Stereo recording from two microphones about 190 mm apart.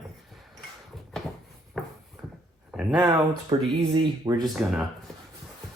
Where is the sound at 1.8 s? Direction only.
Centre (ahead or behind).